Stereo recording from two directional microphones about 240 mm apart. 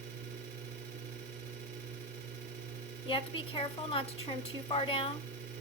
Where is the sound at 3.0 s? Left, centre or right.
Left.